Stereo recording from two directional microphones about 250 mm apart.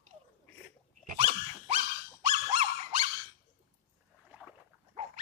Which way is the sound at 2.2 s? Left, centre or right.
Right.